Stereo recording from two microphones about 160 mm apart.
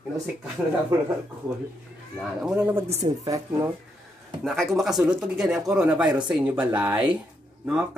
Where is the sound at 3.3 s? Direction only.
20° right (ahead or behind).